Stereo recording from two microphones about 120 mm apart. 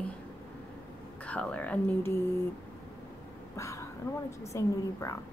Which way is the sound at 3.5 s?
25° left (ahead or behind).